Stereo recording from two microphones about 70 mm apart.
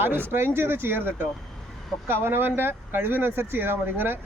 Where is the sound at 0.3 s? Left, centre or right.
Right.